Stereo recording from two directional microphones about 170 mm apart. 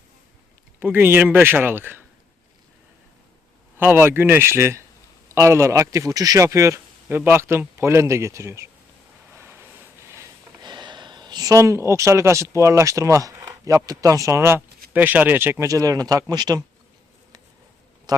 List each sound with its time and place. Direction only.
0.8 s speech: 10° right (ahead or behind)
3.8 s speech: 10° right (ahead or behind)
9.3 s vehicle: 15° right (ahead or behind)
10.6 s speech: 25° right (ahead or behind)